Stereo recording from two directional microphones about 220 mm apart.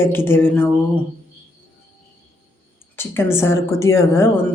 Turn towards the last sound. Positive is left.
turn(degrees=10)  # may be behind; listen again after turning